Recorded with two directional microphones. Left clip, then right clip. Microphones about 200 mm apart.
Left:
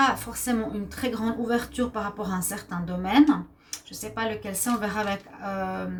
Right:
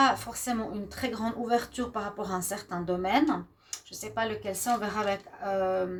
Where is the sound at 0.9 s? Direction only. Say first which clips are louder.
Left 3 dB; 45° right (ahead or behind).